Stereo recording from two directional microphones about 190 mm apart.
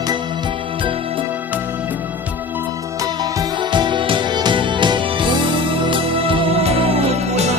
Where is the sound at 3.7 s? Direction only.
25° right (ahead or behind).